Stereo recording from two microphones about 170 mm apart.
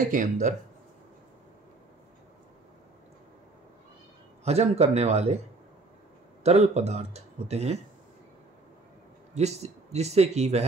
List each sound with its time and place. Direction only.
0.0 s speech: 50° right (ahead or behind)
4.5 s speech: 40° right (ahead or behind)
6.4 s speech: 40° right (ahead or behind)
9.3 s speech: 40° right (ahead or behind)